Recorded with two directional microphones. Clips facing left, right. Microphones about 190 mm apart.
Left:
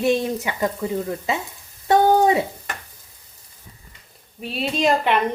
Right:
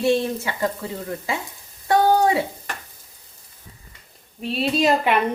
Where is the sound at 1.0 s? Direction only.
20° left (ahead or behind).